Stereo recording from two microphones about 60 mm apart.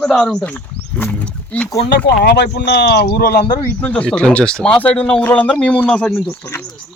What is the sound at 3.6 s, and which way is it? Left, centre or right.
Speech, left.